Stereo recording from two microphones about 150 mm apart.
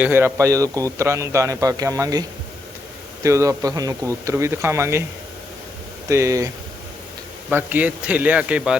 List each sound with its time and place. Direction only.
0.0 s a man's voice: 15° right (ahead or behind)
3.2 s a man's voice: 20° right (ahead or behind)
6.1 s a man's voice: 20° right (ahead or behind)
7.5 s a man's voice: 10° right (ahead or behind)